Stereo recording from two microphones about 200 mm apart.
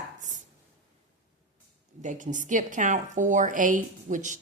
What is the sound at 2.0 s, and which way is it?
A woman's voice, 40° right (ahead or behind).